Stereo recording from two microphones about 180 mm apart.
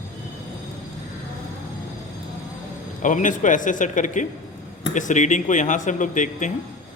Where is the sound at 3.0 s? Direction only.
45° left (ahead or behind).